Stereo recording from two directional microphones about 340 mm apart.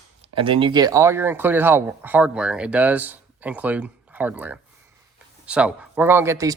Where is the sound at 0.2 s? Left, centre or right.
Centre.